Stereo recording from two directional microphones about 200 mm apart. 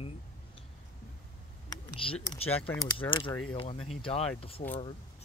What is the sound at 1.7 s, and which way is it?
Clicking, 20° left (ahead or behind).